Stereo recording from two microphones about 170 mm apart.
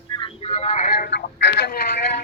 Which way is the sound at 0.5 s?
40° left (ahead or behind).